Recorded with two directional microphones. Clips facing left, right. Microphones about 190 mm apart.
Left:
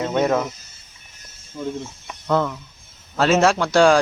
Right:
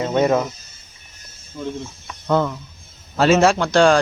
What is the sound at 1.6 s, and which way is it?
Speech, 15° left (ahead or behind).